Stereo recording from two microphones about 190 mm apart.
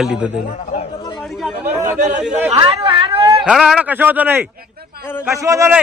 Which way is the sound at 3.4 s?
5° right (ahead or behind).